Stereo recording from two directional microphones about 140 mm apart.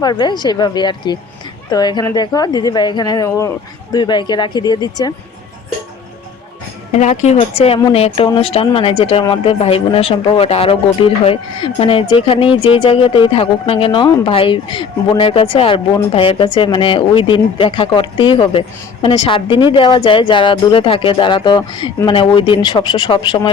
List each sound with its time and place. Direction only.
0.0 s speech: 30° left (ahead or behind)
3.9 s speech: 35° left (ahead or behind)
6.9 s a woman's voice: 55° left (ahead or behind)
7.3 s speech: 45° left (ahead or behind)